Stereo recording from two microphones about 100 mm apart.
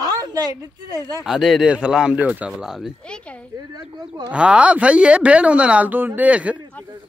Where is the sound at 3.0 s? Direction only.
10° left (ahead or behind).